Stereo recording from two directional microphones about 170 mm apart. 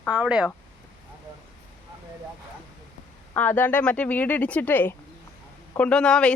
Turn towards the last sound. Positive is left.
turn(degrees=5)  # may be behind; listen again after turning